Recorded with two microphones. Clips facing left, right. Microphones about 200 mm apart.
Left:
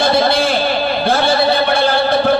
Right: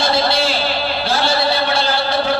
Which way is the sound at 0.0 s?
55° left (ahead or behind).